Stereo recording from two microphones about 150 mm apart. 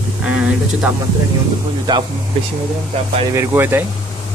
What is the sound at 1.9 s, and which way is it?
Speech, 30° right (ahead or behind).